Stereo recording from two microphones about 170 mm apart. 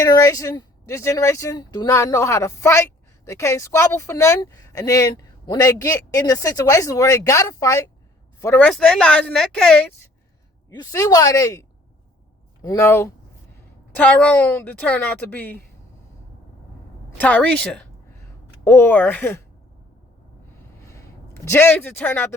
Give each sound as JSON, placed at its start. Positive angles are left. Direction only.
{"t": 0.0, "sound": "speech", "side_deg": 20}
{"t": 10.8, "sound": "speech", "side_deg": 20}
{"t": 12.6, "sound": "a woman's voice", "side_deg": 15}
{"t": 17.2, "sound": "a woman's voice", "side_deg": 10}
{"t": 21.5, "sound": "a woman's voice", "side_deg": 15}